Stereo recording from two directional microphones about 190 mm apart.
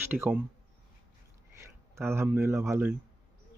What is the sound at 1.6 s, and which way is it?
Speech, 15° right (ahead or behind).